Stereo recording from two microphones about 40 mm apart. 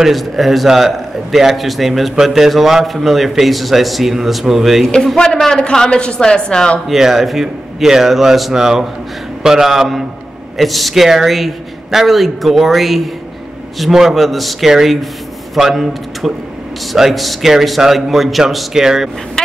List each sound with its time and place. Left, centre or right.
0.0 s a man's voice: centre
5.6 s a woman's voice: centre
6.9 s speech: centre
10.6 s a man's voice: centre
19.4 s vehicle: centre